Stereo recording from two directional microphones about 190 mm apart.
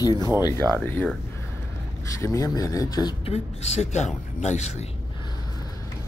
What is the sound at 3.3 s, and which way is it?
Speech, 35° left (ahead or behind).